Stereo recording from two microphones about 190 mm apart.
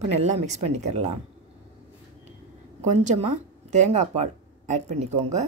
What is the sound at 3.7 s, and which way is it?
Speech, 40° right (ahead or behind).